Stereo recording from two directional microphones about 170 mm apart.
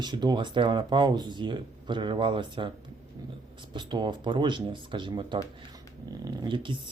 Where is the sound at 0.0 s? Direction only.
25° right (ahead or behind).